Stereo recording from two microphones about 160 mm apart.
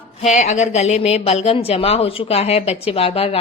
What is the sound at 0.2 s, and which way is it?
A woman's voice, 45° left (ahead or behind).